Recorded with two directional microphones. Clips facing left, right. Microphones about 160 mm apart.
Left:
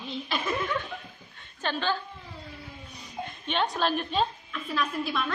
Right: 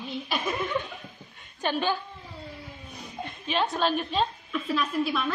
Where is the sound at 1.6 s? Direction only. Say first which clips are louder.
Right 2 dB; 15° right (ahead or behind).